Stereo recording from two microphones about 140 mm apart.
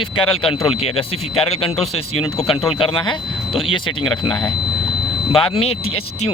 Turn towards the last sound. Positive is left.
turn(degrees=45)  # may be behind; listen again after turning